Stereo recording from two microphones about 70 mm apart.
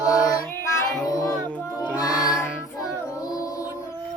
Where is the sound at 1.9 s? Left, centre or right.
Left.